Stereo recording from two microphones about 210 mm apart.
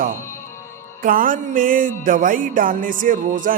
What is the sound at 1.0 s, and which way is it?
A man's voice, 40° right (ahead or behind).